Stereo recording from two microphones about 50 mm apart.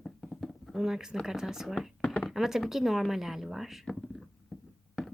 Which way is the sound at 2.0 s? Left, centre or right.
Centre.